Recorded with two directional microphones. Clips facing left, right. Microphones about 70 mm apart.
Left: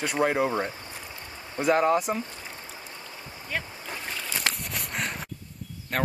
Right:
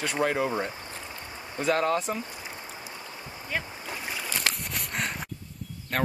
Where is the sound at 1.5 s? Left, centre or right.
Centre.